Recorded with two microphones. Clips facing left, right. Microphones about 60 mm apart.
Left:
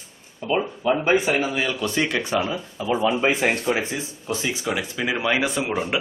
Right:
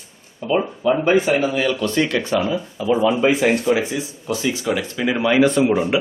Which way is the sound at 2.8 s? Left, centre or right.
Left.